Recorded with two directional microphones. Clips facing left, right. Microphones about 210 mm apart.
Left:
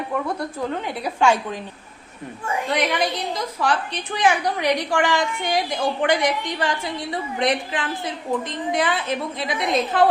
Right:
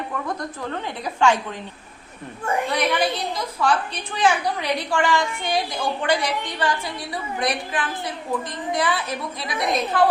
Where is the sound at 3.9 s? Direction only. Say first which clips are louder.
Left 1 dB; 15° left (ahead or behind).